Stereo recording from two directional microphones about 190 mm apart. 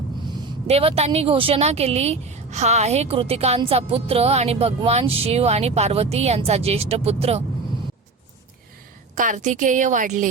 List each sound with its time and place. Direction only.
0.7 s speech: 30° right (ahead or behind)
9.1 s speech: 40° right (ahead or behind)